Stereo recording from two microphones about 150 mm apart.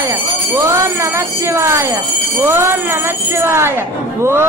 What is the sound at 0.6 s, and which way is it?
Speech, 20° right (ahead or behind).